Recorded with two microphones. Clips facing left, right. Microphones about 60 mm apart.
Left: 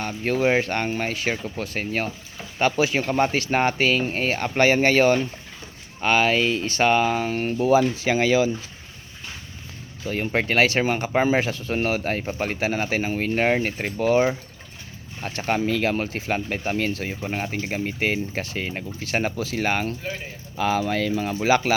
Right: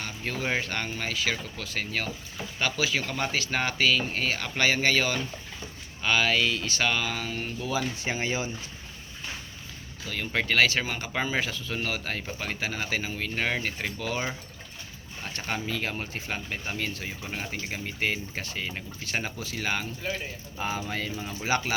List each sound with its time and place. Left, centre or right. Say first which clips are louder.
0.2 s speech: left 9 dB; left
6.0 s speech: left 5 dB; left
8.0 s speech: left 9 dB; left
10.1 s speech: left 5 dB; left
10.8 s speech: left 8 dB; left
15.4 s speech: left 9 dB; left